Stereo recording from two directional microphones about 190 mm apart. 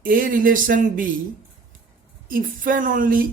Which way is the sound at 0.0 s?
45° right (ahead or behind).